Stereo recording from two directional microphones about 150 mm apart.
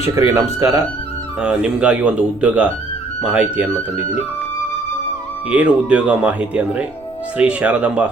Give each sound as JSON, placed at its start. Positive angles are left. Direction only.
{"t": 0.0, "sound": "speech", "side_deg": -20}
{"t": 1.4, "sound": "speech", "side_deg": -5}
{"t": 5.5, "sound": "speech", "side_deg": -10}